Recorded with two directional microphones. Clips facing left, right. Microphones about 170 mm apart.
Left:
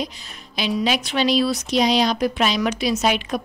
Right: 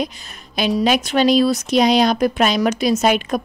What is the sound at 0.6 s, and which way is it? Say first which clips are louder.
Speech: right 5 dB; 50° right (ahead or behind).